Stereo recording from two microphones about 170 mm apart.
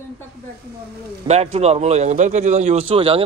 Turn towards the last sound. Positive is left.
turn(degrees=-35)  # may be behind; listen again after turning